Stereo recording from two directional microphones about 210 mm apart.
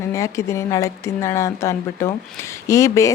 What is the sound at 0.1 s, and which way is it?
A woman's voice, 15° left (ahead or behind).